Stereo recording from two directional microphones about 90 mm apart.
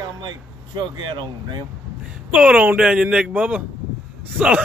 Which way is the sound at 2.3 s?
15° right (ahead or behind).